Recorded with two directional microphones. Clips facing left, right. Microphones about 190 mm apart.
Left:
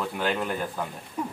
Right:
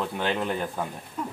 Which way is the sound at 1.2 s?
15° left (ahead or behind).